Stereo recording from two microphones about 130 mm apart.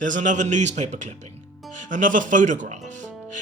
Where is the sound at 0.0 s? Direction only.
75° right (ahead or behind).